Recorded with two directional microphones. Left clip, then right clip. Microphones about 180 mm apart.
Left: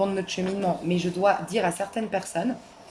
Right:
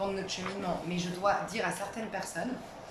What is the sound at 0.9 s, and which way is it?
Speech, 50° left (ahead or behind).